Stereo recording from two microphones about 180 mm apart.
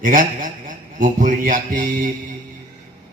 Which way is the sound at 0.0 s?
50° right (ahead or behind).